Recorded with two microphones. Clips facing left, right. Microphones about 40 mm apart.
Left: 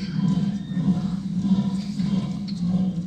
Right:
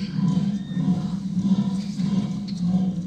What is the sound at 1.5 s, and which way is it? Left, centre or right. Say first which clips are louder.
Music: even; centre.